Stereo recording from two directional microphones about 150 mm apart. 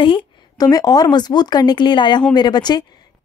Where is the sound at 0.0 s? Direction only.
35° left (ahead or behind).